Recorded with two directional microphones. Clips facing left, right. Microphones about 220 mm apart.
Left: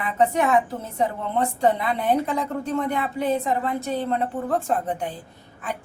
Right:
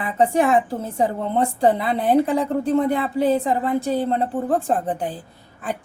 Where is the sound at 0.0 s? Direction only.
30° right (ahead or behind).